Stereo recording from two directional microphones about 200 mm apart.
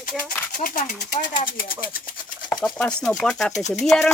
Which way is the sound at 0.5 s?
45° left (ahead or behind).